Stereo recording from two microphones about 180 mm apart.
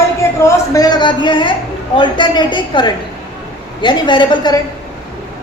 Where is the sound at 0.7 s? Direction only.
20° left (ahead or behind).